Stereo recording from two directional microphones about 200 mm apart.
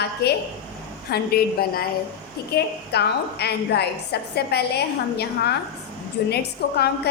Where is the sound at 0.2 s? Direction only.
55° left (ahead or behind).